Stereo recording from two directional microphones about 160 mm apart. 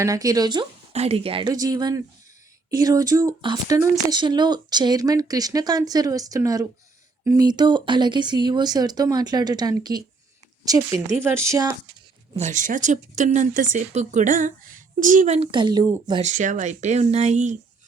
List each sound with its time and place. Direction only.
0.0 s speech: 20° right (ahead or behind)
0.9 s speech: 40° right (ahead or behind)
11.2 s speech: 15° right (ahead or behind)
12.4 s speech: 50° right (ahead or behind)
15.5 s speech: 30° right (ahead or behind)
16.2 s speech: 50° right (ahead or behind)